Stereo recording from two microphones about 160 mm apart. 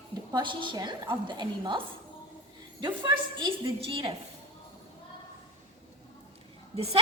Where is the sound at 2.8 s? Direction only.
30° right (ahead or behind).